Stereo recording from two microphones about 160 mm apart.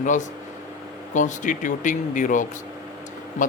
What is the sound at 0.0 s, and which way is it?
Speech, 50° left (ahead or behind).